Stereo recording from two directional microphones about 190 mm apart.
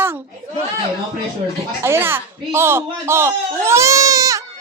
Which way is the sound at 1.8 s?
10° right (ahead or behind).